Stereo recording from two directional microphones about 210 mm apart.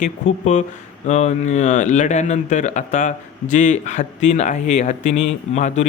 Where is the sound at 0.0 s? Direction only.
35° left (ahead or behind).